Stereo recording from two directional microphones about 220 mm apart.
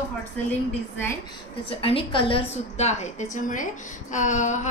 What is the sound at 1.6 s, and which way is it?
A woman's voice, 25° left (ahead or behind).